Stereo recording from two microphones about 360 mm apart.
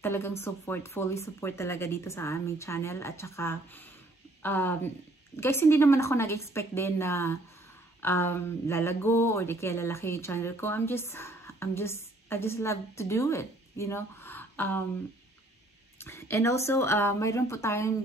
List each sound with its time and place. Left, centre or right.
0.0 s speech: centre
16.0 s speech: centre